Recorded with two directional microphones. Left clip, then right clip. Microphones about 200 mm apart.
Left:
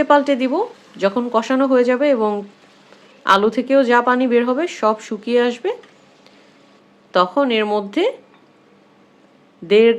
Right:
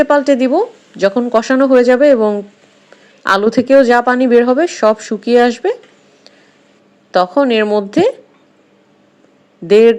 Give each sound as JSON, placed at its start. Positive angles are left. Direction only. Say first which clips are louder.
{"t": 0.0, "sound": "speech", "louder": "right 4 dB", "side_deg": -25}
{"t": 7.1, "sound": "speech", "louder": "right 4 dB", "side_deg": -25}
{"t": 9.6, "sound": "speech", "louder": "right 5 dB", "side_deg": -30}